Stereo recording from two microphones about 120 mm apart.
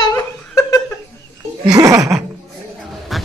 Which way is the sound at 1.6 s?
30° right (ahead or behind).